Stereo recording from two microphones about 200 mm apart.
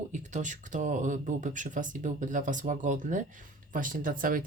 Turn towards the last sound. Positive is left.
turn(degrees=-45)  # may be behind; listen again after turning